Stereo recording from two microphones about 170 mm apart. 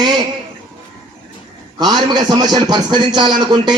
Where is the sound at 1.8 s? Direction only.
25° right (ahead or behind).